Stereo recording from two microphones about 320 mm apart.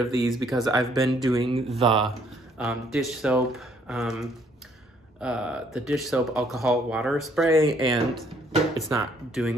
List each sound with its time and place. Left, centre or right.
0.0 s speech: centre
2.6 s speech: centre